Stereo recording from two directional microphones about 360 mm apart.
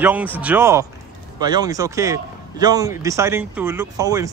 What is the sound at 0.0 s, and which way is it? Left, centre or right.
A man's voice, centre.